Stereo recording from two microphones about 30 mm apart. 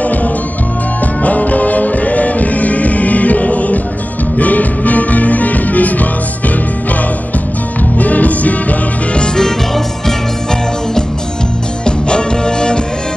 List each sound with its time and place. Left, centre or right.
0.0 s music: left
8.0 s music: left
11.8 s music: left